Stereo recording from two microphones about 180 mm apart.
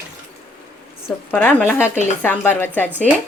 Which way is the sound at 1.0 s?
10° left (ahead or behind).